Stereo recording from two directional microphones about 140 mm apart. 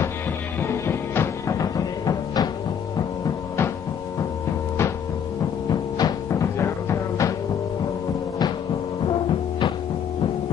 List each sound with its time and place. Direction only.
0.6 s music: 15° left (ahead or behind)
5.7 s music: 30° left (ahead or behind)